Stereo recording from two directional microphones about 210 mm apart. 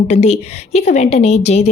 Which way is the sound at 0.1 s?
30° left (ahead or behind).